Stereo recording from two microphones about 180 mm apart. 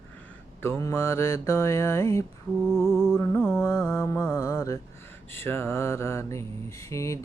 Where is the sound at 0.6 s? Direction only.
15° left (ahead or behind).